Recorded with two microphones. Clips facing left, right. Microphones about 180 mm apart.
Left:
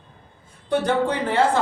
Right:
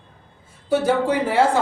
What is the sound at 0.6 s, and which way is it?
Speech, 5° right (ahead or behind).